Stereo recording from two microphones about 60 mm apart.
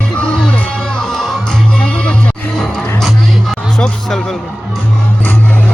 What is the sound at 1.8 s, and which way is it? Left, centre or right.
Music, centre.